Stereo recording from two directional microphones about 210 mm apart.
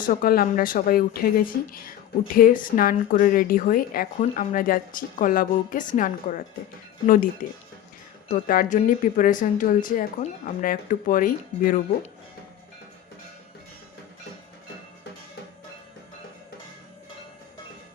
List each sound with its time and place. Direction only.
0.0 s speech: 45° left (ahead or behind)
7.4 s speech: 40° left (ahead or behind)